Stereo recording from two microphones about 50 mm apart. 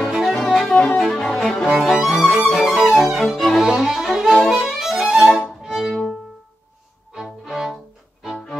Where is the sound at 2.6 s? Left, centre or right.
Centre.